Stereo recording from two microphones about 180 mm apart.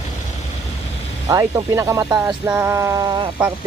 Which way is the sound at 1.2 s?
20° right (ahead or behind).